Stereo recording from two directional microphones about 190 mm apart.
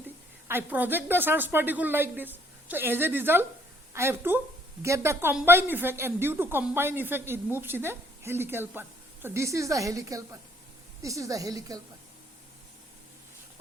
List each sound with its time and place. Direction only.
0.4 s a woman's voice: 10° right (ahead or behind)